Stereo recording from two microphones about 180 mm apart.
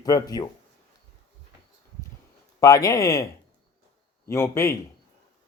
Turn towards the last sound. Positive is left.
turn(degrees=15)  # may be behind; listen again after turning